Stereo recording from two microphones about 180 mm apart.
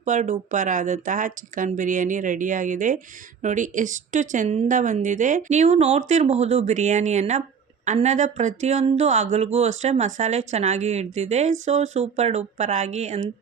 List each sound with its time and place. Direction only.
0.0 s speech: 40° right (ahead or behind)